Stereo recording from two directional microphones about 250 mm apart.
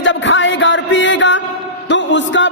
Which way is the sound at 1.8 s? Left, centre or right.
Left.